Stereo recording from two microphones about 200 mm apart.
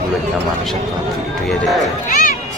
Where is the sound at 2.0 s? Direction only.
45° left (ahead or behind).